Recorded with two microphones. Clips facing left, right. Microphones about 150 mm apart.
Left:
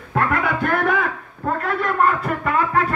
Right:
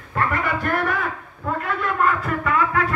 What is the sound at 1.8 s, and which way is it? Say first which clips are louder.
Speech: left 2 dB; 40° left (ahead or behind).